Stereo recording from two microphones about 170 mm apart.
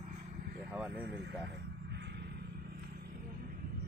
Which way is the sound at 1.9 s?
80° right.